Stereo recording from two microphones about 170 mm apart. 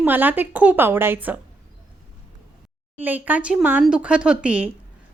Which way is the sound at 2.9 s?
10° right (ahead or behind).